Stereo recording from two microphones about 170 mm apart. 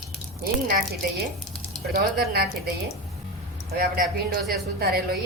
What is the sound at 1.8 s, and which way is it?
Speech, 65° right (ahead or behind).